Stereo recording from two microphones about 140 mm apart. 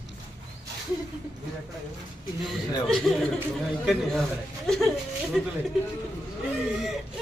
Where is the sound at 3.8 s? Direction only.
Centre (ahead or behind).